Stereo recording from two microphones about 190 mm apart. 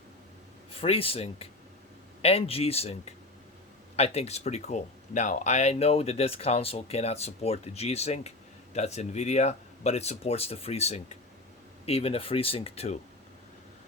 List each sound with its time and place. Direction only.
0.8 s speech: 30° left (ahead or behind)
3.9 s speech: 35° left (ahead or behind)